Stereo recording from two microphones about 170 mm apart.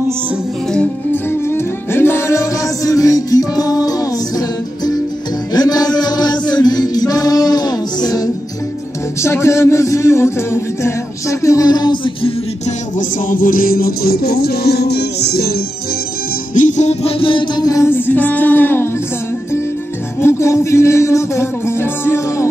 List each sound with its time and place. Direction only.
0.7 s music: 10° left (ahead or behind)
9.2 s speech: 15° left (ahead or behind); by 12.7 s 35° left (ahead or behind)
13.3 s music: 55° left (ahead or behind); by 15.5 s 70° left (ahead or behind)
16.5 s music: 45° left (ahead or behind); by 18.9 s 10° left (ahead or behind)
20.2 s music: 15° left (ahead or behind)